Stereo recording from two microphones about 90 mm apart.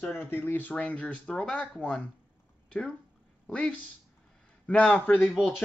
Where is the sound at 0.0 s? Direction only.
25° left (ahead or behind).